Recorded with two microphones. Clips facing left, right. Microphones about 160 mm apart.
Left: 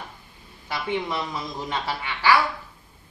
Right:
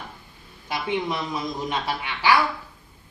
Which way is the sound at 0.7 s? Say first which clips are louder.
Right 1 dB; 15° right (ahead or behind).